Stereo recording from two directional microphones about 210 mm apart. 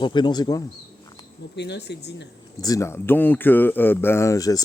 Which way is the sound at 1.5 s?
55° left (ahead or behind).